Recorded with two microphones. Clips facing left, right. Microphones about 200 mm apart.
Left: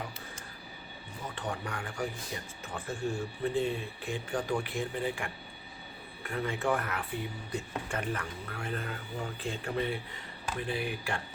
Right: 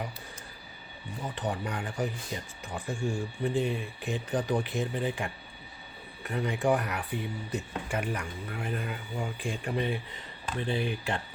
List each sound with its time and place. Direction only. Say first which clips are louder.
1.4 s speech: right 4 dB; 20° right (ahead or behind)